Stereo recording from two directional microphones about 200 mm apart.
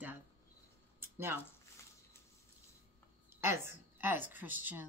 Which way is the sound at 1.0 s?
10° right (ahead or behind).